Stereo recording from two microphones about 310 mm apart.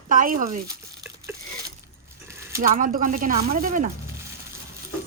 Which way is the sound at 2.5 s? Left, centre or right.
Right.